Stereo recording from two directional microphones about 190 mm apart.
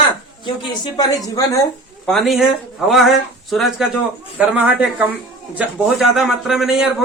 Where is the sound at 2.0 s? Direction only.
Centre (ahead or behind).